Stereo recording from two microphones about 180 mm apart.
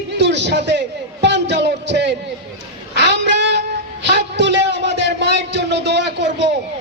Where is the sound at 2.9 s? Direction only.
75° right (ahead or behind).